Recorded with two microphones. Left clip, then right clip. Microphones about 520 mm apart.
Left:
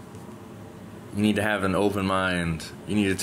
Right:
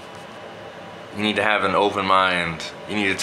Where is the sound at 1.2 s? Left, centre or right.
Left.